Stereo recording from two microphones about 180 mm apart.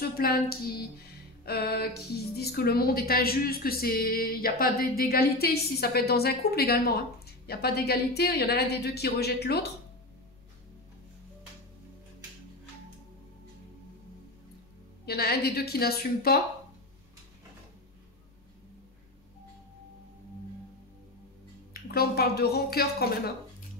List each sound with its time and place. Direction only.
0.0 s a woman's voice: 55° left (ahead or behind)
15.0 s a woman's voice: 60° left (ahead or behind)
21.9 s a woman's voice: 60° left (ahead or behind)